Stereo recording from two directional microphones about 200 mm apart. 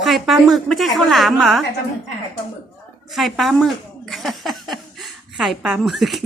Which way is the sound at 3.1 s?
Centre (ahead or behind).